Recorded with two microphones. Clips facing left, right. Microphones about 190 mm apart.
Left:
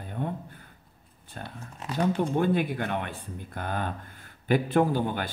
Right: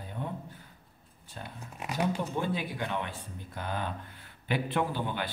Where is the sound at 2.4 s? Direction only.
55° left (ahead or behind).